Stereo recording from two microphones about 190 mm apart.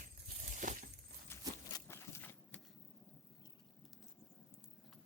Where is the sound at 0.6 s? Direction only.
45° right (ahead or behind).